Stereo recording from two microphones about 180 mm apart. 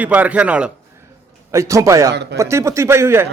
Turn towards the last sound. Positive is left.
turn(degrees=-15)  # may be behind; listen again after turning